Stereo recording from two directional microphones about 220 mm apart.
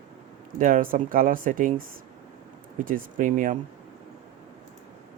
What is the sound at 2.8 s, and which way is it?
Speech, 35° right (ahead or behind).